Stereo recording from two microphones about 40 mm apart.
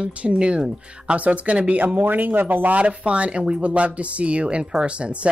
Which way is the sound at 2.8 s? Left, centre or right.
Right.